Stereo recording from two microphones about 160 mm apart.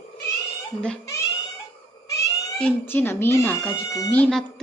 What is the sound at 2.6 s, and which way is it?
Speech, 10° left (ahead or behind).